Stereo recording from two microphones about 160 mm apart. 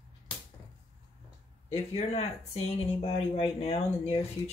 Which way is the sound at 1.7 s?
40° left (ahead or behind).